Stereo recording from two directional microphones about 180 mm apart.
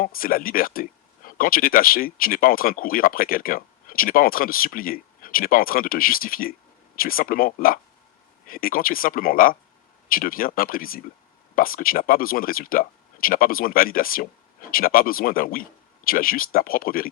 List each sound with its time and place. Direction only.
0.0 s speech: 55° left (ahead or behind)